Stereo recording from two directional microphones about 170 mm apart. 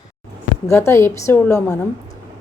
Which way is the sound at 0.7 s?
15° left (ahead or behind).